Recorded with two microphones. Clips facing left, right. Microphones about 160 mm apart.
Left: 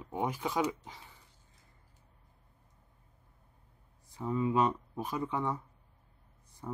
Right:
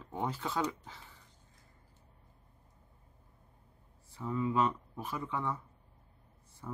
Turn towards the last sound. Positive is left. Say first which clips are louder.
# left 3 dB
turn(degrees=20)  # may be behind; listen again after turning